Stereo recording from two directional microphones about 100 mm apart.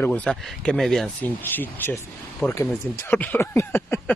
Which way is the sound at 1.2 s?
20° left (ahead or behind).